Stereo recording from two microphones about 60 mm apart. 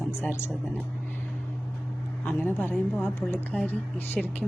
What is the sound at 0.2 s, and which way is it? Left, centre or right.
Speech, left.